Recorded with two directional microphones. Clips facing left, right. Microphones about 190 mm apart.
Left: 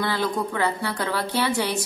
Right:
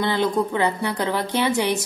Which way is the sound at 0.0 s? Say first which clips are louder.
Right 4 dB; 20° right (ahead or behind).